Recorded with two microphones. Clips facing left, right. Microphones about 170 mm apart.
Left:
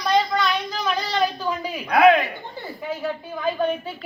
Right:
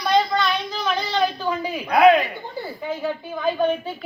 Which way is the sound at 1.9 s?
Centre (ahead or behind).